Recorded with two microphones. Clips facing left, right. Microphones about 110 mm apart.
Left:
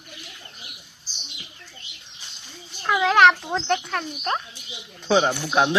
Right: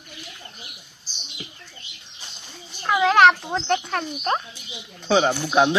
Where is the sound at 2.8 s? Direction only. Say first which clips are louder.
Right 1 dB; 5° right (ahead or behind).